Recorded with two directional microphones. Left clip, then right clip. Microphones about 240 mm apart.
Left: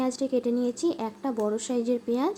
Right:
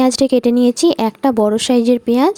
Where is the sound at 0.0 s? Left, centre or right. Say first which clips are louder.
Right 14 dB; right.